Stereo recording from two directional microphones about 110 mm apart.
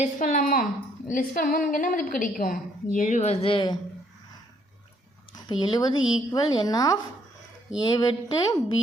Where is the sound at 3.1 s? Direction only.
80° left; by 3.7 s 50° left (ahead or behind).